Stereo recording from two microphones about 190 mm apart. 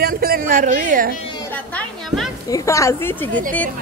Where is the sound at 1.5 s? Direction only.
10° left (ahead or behind).